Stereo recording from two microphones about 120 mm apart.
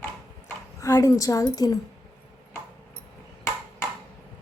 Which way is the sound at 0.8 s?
30° left (ahead or behind).